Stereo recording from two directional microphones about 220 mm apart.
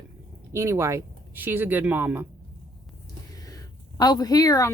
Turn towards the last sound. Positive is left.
turn(degrees=15)  # may be behind; listen again after turning